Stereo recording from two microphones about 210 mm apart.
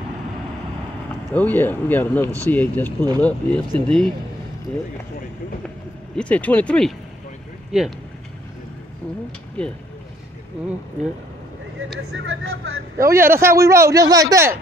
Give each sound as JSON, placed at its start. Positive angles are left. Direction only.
{"t": 1.3, "sound": "speech", "side_deg": 10}
{"t": 6.1, "sound": "speech", "side_deg": 5}
{"t": 12.2, "sound": "speech", "side_deg": -70}
{"t": 12.9, "sound": "a man's voice", "side_deg": -15}